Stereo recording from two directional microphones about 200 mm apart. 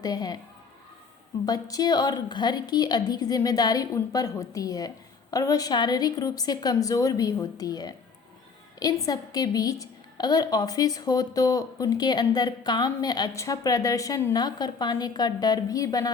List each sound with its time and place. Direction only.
0.0 s a woman's voice: 20° left (ahead or behind)
1.5 s a woman's voice: 20° left (ahead or behind)
9.0 s a woman's voice: 20° left (ahead or behind)